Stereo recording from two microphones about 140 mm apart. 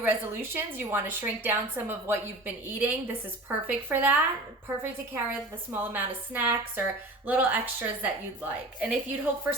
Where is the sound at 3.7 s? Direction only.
15° right (ahead or behind).